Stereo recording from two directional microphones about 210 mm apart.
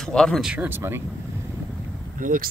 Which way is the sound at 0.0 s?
5° left (ahead or behind).